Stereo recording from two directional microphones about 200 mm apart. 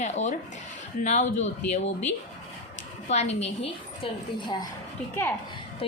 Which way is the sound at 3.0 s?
35° left (ahead or behind).